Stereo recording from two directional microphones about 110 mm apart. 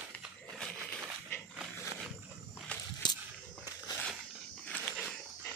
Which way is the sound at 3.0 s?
45° left (ahead or behind).